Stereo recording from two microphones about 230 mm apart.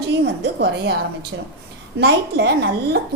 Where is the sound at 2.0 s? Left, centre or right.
Right.